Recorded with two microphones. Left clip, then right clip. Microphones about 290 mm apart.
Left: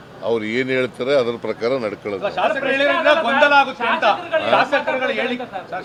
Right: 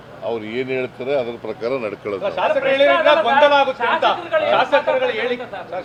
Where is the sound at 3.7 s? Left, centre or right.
Left.